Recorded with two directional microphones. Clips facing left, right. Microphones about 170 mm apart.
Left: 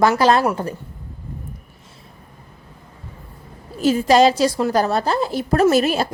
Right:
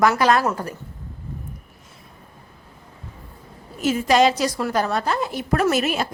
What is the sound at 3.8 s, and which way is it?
A woman's voice, 35° left (ahead or behind).